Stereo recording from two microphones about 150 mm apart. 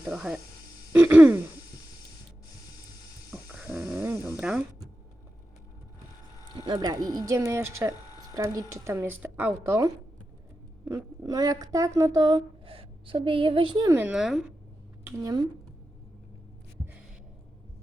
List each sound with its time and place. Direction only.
0.1 s speech: centre (ahead or behind)
0.9 s throat clearing: 10° right (ahead or behind)
3.5 s dog: 5° right (ahead or behind)
3.8 s a sound: 15° right (ahead or behind)
4.4 s a sound: 5° right (ahead or behind)
6.6 s speech: 25° right (ahead or behind)
13.9 s speech: 10° right (ahead or behind)
15.0 s speech: 25° right (ahead or behind)